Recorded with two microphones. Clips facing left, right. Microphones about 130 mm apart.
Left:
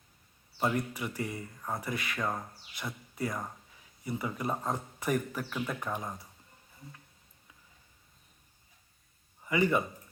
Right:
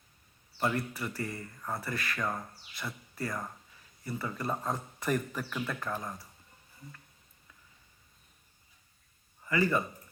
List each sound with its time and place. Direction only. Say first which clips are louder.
0.8 s speech: left 1 dB; 15° left (ahead or behind)
9.4 s a man's voice: left 1 dB; 20° left (ahead or behind)